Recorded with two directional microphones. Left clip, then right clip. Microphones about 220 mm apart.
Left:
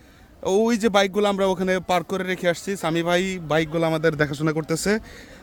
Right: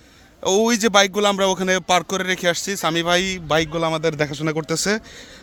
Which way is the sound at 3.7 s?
15° left (ahead or behind).